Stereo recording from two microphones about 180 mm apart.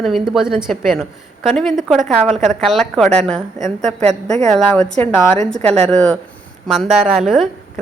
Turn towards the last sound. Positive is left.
turn(degrees=0)  # may be behind; listen again after turning